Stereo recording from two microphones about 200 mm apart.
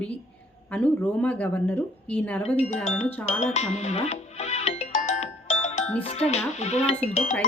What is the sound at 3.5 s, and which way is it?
Music, 35° left (ahead or behind).